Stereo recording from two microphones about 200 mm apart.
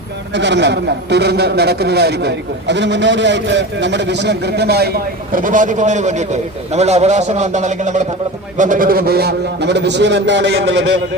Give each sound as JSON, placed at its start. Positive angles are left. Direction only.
{"t": 0.3, "sound": "a man's voice", "side_deg": -60}